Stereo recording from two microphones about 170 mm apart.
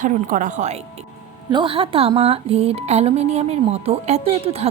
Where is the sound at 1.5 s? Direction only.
30° right (ahead or behind).